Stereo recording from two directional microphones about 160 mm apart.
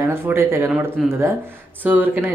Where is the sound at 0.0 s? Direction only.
15° right (ahead or behind).